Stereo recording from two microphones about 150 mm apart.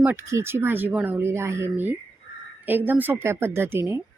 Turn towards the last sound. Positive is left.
turn(degrees=-15)  # may be behind; listen again after turning